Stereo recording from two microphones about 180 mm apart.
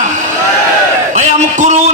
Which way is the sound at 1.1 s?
40° right (ahead or behind).